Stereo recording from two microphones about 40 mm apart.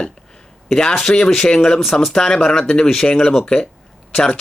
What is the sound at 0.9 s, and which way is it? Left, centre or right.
Speech, centre.